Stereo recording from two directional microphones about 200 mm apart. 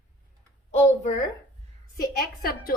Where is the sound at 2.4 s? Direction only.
50° left (ahead or behind).